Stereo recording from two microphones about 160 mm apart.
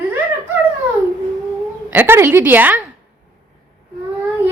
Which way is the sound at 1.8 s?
10° right (ahead or behind).